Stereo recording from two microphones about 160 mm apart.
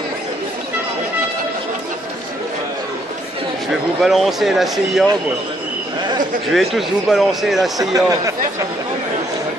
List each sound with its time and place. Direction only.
4.0 s speech: centre (ahead or behind)
6.5 s speech: centre (ahead or behind)
7.8 s speech: 20° right (ahead or behind)